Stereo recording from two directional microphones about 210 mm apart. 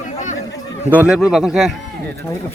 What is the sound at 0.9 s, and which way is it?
Speech, 5° right (ahead or behind).